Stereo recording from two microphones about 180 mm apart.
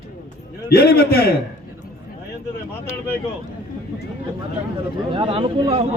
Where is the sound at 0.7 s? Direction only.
60° left (ahead or behind).